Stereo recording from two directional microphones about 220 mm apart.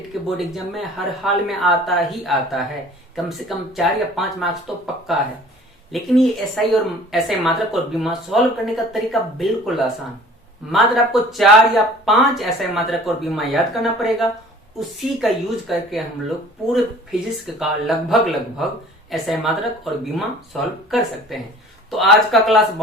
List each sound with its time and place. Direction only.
0.3 s speech: centre (ahead or behind)